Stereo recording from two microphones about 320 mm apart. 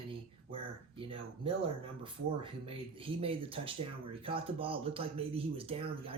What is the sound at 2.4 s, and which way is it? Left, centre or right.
Speech, centre.